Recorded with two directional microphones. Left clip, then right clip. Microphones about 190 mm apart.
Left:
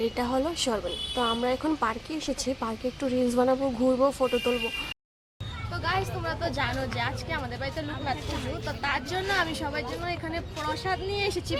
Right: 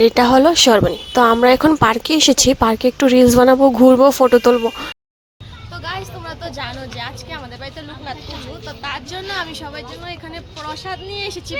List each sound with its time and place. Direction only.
0.0 s speech: 50° right (ahead or behind)
5.8 s speech: 5° left (ahead or behind)